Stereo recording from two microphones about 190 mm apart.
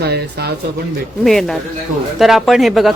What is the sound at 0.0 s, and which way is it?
Speech, 55° right (ahead or behind).